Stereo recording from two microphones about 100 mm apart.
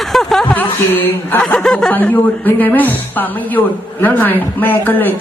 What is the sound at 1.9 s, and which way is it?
A woman's voice, 15° left (ahead or behind).